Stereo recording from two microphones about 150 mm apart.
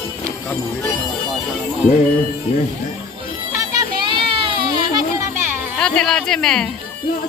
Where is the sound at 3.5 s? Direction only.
30° right (ahead or behind).